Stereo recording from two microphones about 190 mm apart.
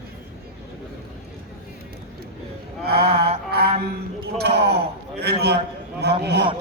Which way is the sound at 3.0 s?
30° right (ahead or behind).